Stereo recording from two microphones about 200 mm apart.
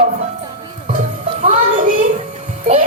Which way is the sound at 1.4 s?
40° right (ahead or behind).